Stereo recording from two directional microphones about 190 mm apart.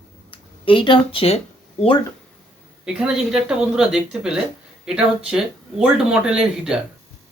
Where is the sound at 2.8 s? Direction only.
5° right (ahead or behind).